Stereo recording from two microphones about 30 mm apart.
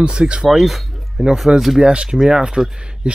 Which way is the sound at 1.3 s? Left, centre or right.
Centre.